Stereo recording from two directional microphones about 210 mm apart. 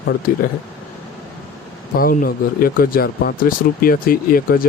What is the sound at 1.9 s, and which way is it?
Speech, 45° left (ahead or behind).